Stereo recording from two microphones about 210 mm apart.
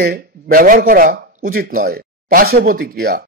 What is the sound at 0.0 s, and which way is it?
Speech, 45° right (ahead or behind).